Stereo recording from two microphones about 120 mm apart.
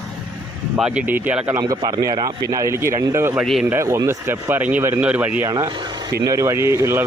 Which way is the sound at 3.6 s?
20° right (ahead or behind).